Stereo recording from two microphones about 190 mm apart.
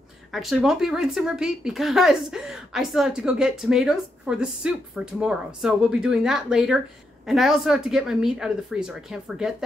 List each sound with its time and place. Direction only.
0.3 s speech: centre (ahead or behind)